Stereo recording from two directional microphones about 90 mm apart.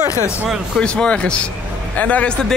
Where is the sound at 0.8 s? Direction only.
10° left (ahead or behind).